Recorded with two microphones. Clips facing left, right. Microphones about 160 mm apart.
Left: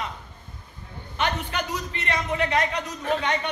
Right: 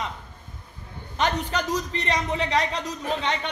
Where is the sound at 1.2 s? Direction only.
35° right (ahead or behind).